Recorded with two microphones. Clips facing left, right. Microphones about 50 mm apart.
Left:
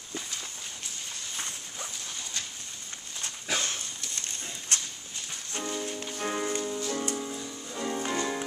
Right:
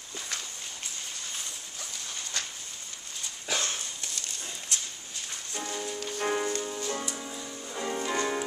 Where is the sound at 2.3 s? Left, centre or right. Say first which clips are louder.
Right 4 dB; right.